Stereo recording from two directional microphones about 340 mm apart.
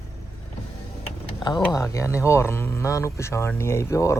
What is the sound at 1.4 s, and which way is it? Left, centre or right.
Speech, centre.